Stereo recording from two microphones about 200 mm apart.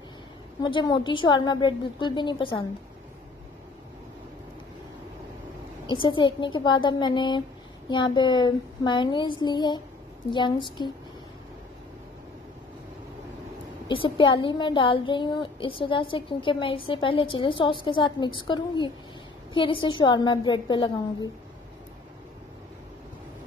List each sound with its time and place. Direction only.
0.6 s speech: 20° left (ahead or behind)
5.9 s speech: 25° left (ahead or behind)
13.8 s speech: 25° left (ahead or behind)